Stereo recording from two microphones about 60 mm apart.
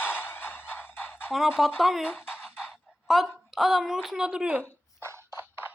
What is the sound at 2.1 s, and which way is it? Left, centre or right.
Music, left.